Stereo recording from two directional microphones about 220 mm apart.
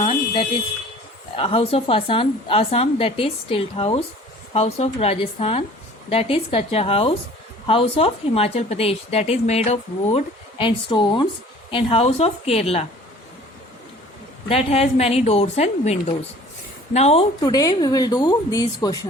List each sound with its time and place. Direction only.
0.0 s a sound: 25° left (ahead or behind)
1.4 s speech: 25° left (ahead or behind)
14.4 s a woman's voice: 25° left (ahead or behind)